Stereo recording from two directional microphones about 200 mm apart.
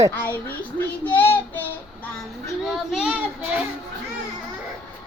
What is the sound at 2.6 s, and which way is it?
Child singing, centre (ahead or behind).